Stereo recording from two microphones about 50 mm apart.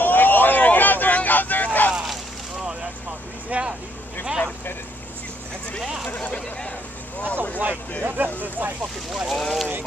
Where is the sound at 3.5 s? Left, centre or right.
Right.